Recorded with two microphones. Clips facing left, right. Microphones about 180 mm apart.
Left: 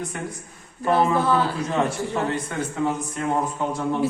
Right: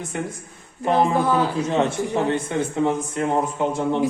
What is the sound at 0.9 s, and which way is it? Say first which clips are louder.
A man's voice: right 1 dB; 15° right (ahead or behind).